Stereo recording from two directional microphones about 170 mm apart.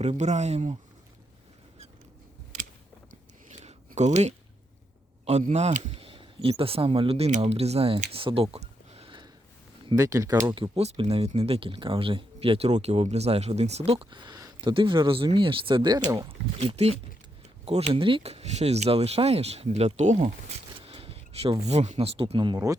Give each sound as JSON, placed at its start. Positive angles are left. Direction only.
{"t": 0.0, "sound": "speech", "side_deg": -40}
{"t": 3.5, "sound": "a sound", "side_deg": -40}
{"t": 5.5, "sound": "speech", "side_deg": -40}
{"t": 8.1, "sound": "a sound", "side_deg": -30}
{"t": 9.8, "sound": "speech", "side_deg": -20}
{"t": 10.6, "sound": "speech", "side_deg": -35}
{"t": 20.8, "sound": "speech", "side_deg": -35}